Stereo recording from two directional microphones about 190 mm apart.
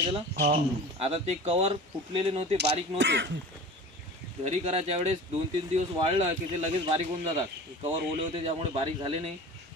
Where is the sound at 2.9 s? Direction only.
70° right (ahead or behind).